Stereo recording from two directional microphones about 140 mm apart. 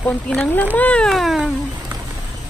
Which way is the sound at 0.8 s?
10° left (ahead or behind).